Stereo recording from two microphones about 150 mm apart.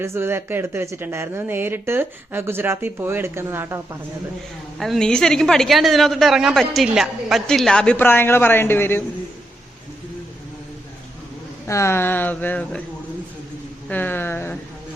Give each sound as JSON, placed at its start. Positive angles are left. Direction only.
{"t": 0.0, "sound": "speech", "side_deg": -15}
{"t": 4.8, "sound": "speech", "side_deg": 5}
{"t": 11.6, "sound": "speech", "side_deg": 20}
{"t": 13.8, "sound": "speech", "side_deg": 10}